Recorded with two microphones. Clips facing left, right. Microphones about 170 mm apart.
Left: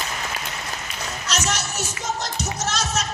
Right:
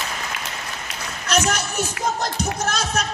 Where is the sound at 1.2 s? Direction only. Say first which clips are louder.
Right 6 dB; 60° right (ahead or behind).